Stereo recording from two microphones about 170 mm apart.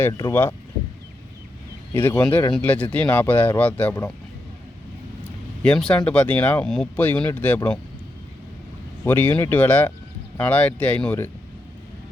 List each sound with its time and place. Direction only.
0.0 s speech: 20° left (ahead or behind)
1.9 s speech: 15° left (ahead or behind)
5.6 s speech: 5° left (ahead or behind)
9.0 s speech: 10° left (ahead or behind)